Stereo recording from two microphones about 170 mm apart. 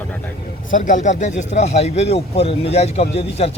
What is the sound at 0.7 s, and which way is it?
Speech, 50° left (ahead or behind).